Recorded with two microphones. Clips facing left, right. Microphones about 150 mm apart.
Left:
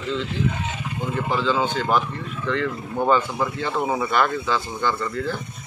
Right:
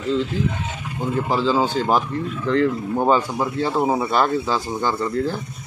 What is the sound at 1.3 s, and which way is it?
Speech, 35° right (ahead or behind).